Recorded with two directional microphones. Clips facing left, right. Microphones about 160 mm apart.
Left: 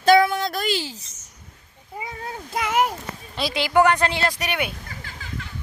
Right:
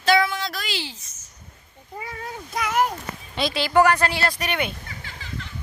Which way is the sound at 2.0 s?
25° left (ahead or behind).